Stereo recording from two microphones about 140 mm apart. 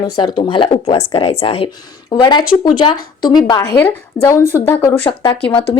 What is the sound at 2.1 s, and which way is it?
A woman's voice, 30° left (ahead or behind).